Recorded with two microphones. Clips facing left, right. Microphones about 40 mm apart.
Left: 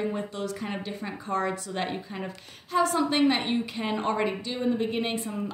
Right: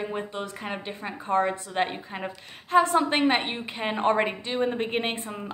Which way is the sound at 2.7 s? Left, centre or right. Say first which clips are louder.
Right 4 dB; right.